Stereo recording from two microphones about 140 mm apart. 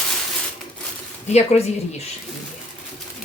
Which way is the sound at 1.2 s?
50° left (ahead or behind).